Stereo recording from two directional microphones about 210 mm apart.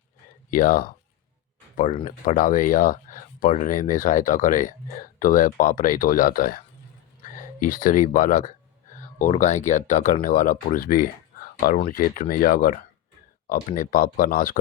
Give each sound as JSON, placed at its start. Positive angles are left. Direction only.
{"t": 0.5, "sound": "speech", "side_deg": 40}